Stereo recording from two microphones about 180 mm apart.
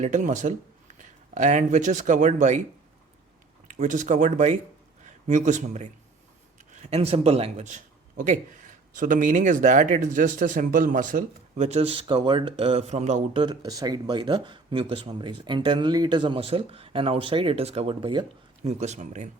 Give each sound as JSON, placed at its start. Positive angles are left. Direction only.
{"t": 0.0, "sound": "speech", "side_deg": -45}
{"t": 3.7, "sound": "speech", "side_deg": -45}
{"t": 13.4, "sound": "speech", "side_deg": -20}